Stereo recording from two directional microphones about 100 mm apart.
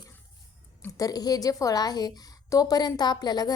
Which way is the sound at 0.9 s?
35° left (ahead or behind).